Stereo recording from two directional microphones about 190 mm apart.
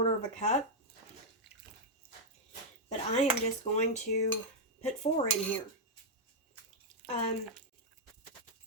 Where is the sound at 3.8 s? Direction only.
35° left (ahead or behind).